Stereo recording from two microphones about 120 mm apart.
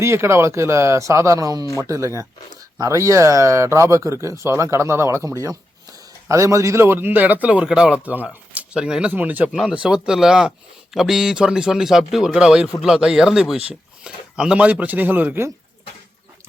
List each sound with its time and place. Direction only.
0.0 s speech: 20° right (ahead or behind)